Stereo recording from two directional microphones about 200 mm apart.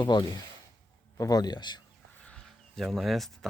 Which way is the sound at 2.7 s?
Centre (ahead or behind).